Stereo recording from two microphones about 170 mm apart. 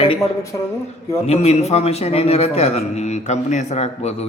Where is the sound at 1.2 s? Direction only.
40° left (ahead or behind).